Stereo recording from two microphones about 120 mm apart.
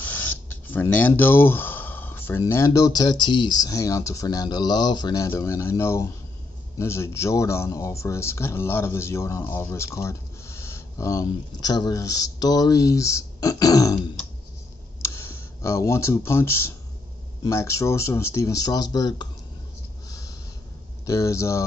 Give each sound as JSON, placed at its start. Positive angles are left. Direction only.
{"t": 0.0, "sound": "speech", "side_deg": 15}
{"t": 15.0, "sound": "speech", "side_deg": 20}
{"t": 20.1, "sound": "a sound", "side_deg": 30}
{"t": 21.0, "sound": "speech", "side_deg": 25}